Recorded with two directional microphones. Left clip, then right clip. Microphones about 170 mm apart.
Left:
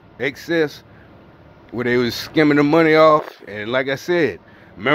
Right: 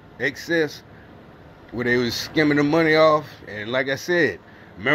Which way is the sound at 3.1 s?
50° left (ahead or behind).